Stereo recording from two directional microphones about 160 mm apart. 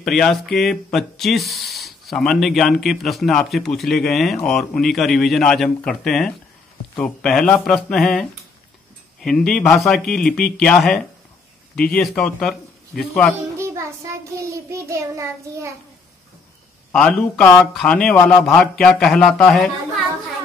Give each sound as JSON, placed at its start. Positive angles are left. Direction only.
{"t": 0.0, "sound": "speech", "side_deg": 0}
{"t": 14.5, "sound": "child singing", "side_deg": -20}
{"t": 16.9, "sound": "speech", "side_deg": 5}
{"t": 18.1, "sound": "speech", "side_deg": 15}
{"t": 18.4, "sound": "speech", "side_deg": 5}